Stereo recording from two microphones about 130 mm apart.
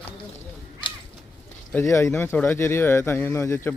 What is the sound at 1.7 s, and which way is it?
Speech, 20° left (ahead or behind).